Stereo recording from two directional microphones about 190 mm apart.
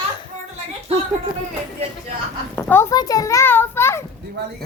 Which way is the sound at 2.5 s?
15° left (ahead or behind).